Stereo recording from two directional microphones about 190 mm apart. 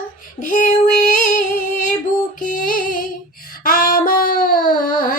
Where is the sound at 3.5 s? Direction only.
50° left (ahead or behind).